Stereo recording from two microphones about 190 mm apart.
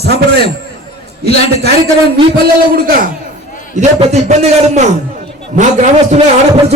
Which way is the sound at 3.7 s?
35° right (ahead or behind).